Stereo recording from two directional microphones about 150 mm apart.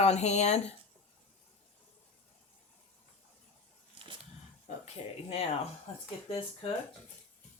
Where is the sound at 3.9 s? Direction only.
35° right (ahead or behind).